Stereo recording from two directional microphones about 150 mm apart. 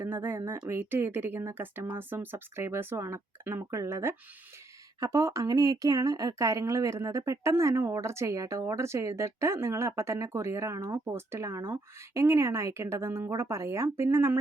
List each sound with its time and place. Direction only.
0.0 s speech: 15° right (ahead or behind)